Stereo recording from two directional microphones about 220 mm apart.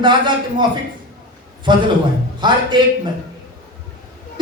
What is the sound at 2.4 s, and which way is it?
Speech, 20° right (ahead or behind).